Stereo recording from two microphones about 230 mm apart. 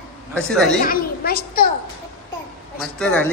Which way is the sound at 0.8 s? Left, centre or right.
Left.